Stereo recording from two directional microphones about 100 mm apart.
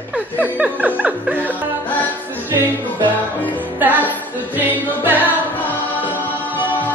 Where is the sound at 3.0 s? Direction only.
15° left (ahead or behind).